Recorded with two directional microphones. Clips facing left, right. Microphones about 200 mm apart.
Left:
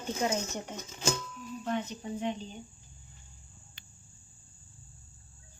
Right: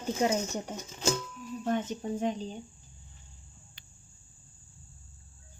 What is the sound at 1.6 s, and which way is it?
Speech, 45° right (ahead or behind).